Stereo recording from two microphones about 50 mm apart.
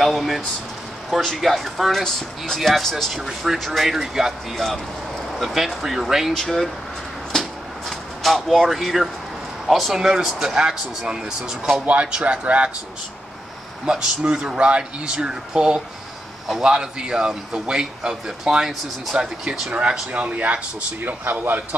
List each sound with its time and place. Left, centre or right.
0.0 s speech: centre
5.4 s speech: centre
6.3 s speech: centre
7.3 s a sound: centre
8.2 s a man's voice: centre
11.8 s speech: right
13.8 s a man's voice: centre
19.7 s speech: right
21.2 s a man's voice: right